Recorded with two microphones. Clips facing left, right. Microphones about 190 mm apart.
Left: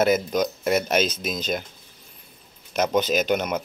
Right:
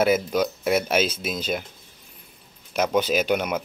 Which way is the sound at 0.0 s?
5° right (ahead or behind).